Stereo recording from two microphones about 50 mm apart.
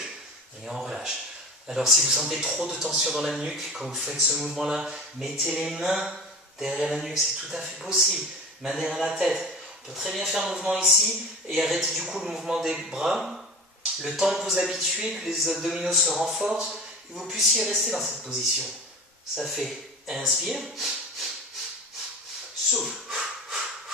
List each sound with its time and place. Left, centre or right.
0.7 s a sound: centre
1.7 s a man's voice: centre
22.7 s snort: centre